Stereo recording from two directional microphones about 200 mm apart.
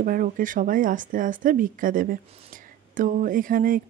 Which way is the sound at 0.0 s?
40° right (ahead or behind).